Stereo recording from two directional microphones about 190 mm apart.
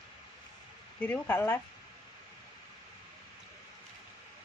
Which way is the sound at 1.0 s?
10° left (ahead or behind).